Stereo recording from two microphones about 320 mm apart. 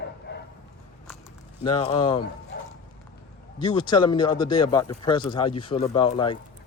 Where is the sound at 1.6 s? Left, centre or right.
Centre.